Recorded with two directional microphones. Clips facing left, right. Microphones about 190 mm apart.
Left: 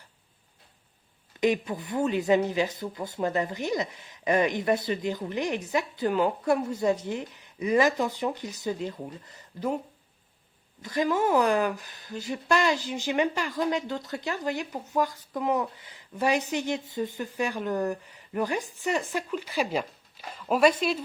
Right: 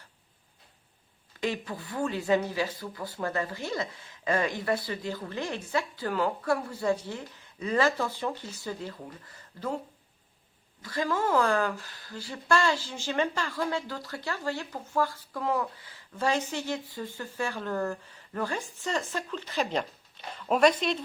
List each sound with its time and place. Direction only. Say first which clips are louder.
1.4 s speech: left 7 dB; 20° left (ahead or behind)
10.8 s speech: left 4 dB; 20° left (ahead or behind)